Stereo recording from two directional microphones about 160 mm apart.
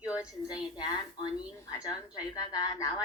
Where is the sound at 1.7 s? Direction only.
25° left (ahead or behind).